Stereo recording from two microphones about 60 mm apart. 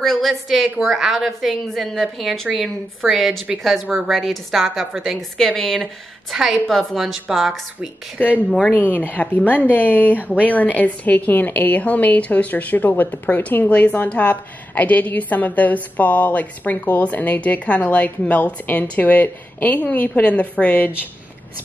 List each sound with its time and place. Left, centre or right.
0.0 s a woman's voice: centre
8.7 s a woman's voice: left